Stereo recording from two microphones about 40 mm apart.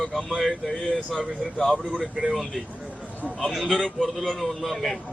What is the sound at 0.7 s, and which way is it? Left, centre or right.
Speech, centre.